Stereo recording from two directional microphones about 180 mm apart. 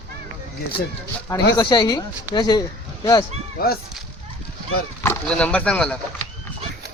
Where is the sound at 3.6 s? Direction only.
55° left (ahead or behind).